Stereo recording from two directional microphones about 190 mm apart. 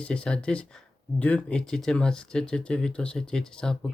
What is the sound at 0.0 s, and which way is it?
Speech, 5° left (ahead or behind).